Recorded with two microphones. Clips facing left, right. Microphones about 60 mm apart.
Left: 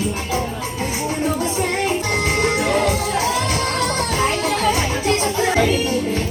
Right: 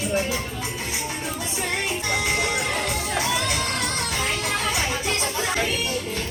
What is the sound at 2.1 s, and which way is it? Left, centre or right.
Music, left.